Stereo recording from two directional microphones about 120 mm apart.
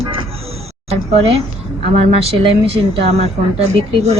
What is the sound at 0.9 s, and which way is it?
A woman's voice, 60° right (ahead or behind).